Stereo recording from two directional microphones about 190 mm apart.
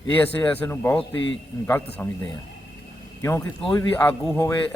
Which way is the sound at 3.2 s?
15° left (ahead or behind).